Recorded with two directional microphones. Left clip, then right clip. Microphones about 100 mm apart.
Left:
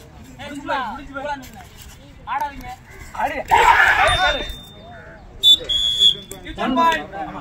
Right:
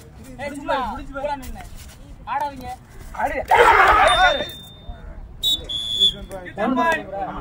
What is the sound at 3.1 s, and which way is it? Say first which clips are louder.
Speech: left 1 dB; 5° left (ahead or behind).